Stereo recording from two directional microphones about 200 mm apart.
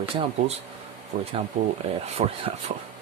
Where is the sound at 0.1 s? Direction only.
25° right (ahead or behind).